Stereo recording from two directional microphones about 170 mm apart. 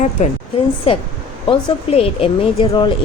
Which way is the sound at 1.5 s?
30° left (ahead or behind).